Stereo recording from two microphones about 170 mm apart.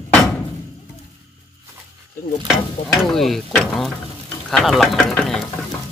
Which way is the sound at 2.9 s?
Centre (ahead or behind).